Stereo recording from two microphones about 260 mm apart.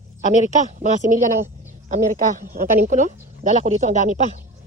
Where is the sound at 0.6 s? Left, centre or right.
Right.